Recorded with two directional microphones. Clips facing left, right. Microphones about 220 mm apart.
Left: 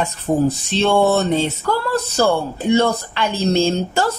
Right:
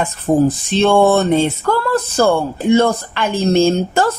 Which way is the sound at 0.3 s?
50° right (ahead or behind).